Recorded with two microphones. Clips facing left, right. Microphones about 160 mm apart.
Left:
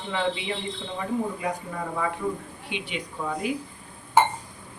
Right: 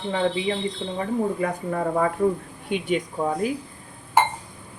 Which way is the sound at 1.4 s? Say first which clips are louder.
Right 5 dB; 50° right (ahead or behind).